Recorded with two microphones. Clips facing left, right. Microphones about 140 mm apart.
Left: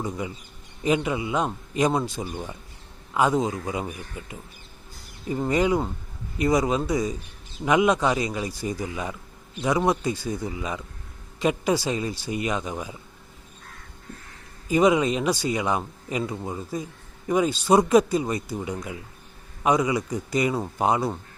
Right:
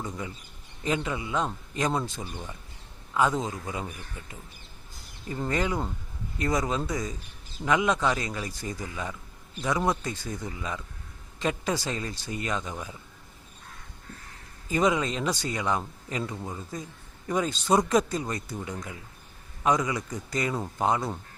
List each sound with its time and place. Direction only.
0.8 s speech: 15° left (ahead or behind)
14.7 s speech: 10° left (ahead or behind)